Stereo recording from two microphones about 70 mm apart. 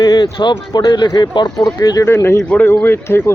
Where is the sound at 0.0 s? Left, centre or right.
Left.